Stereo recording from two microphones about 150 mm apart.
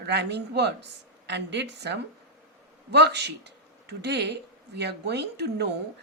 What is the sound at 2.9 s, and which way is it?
A woman's voice, 90° right.